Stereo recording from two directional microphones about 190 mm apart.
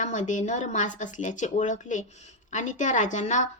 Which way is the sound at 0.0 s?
40° left (ahead or behind).